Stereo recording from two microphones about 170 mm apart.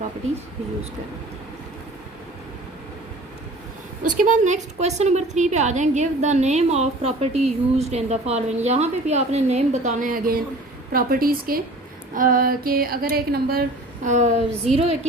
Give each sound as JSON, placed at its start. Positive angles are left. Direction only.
{"t": 4.2, "sound": "a woman's voice", "side_deg": -45}
{"t": 14.7, "sound": "a woman's voice", "side_deg": 0}